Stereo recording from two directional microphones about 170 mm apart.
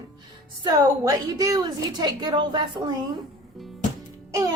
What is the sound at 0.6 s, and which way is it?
A woman's voice, 20° right (ahead or behind).